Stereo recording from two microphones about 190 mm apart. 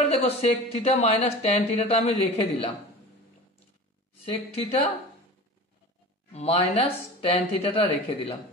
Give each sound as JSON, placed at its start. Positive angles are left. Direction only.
{"t": 0.1, "sound": "speech", "side_deg": 35}
{"t": 4.2, "sound": "speech", "side_deg": 30}
{"t": 6.3, "sound": "speech", "side_deg": 30}